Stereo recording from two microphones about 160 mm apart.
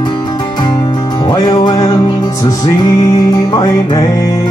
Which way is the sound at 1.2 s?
30° left (ahead or behind).